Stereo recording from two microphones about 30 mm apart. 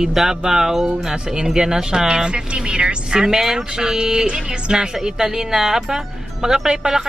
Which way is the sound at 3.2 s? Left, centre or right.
Centre.